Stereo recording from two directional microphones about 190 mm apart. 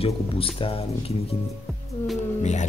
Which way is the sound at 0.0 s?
30° left (ahead or behind).